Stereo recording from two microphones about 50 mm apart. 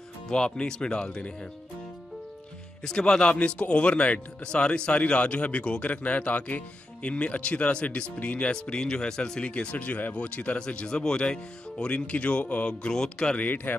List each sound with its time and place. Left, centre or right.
0.3 s speech: centre
2.8 s speech: centre